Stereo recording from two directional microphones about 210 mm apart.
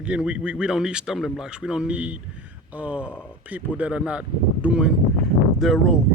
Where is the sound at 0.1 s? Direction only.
5° right (ahead or behind).